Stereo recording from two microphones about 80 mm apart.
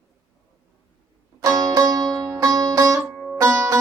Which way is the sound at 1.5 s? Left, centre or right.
Right.